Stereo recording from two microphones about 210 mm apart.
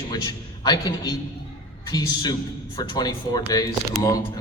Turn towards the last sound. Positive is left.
turn(degrees=15)  # may be behind; listen again after turning